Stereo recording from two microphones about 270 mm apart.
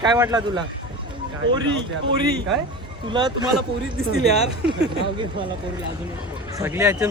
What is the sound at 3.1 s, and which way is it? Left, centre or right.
Speech, centre.